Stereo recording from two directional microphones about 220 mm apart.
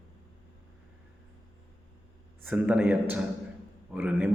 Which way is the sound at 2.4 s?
5° right (ahead or behind).